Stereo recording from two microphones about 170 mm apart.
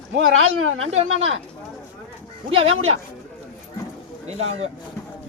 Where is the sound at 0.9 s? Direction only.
40° right (ahead or behind).